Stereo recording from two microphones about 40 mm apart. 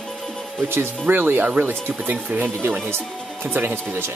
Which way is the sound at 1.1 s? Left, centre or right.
Right.